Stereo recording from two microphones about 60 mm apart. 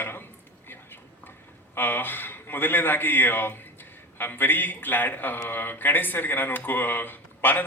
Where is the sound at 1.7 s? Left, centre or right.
Left.